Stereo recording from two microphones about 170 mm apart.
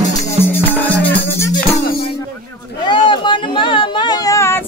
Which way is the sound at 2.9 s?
30° left (ahead or behind).